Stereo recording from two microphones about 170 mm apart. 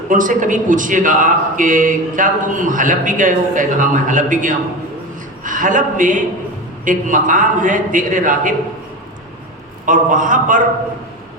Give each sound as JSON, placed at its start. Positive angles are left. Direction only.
{"t": 0.1, "sound": "a man's voice", "side_deg": -50}
{"t": 9.8, "sound": "a man's voice", "side_deg": -50}